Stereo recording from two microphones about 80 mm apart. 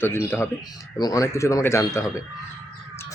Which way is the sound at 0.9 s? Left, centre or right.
Left.